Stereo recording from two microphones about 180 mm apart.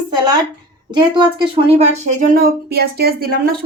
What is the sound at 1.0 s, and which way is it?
Speech, 25° right (ahead or behind).